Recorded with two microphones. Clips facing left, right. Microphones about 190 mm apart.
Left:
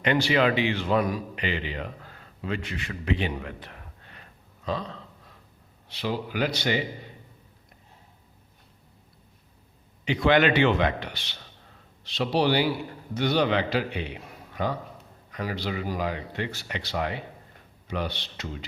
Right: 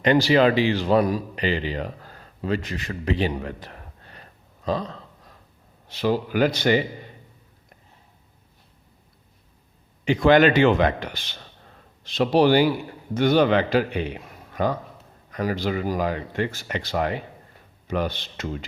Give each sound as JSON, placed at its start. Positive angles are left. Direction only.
{"t": 0.0, "sound": "a man's voice", "side_deg": -35}
{"t": 10.1, "sound": "speech", "side_deg": -45}